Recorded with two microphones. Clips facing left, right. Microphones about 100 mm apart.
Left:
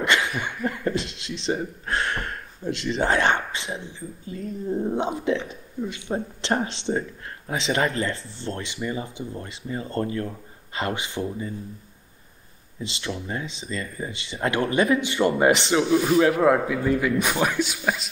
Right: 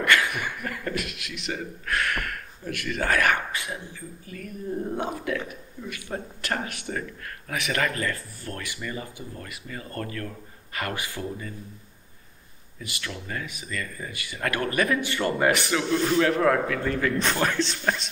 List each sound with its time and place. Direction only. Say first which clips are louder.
0.0 s chuckle: even; 20° left (ahead or behind)
0.4 s speech: left 4 dB; 25° left (ahead or behind)
12.7 s speech: left 5 dB; 25° left (ahead or behind)
16.0 s speech: left 3 dB; 10° left (ahead or behind)